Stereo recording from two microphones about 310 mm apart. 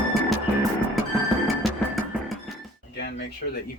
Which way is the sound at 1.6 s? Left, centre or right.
Centre.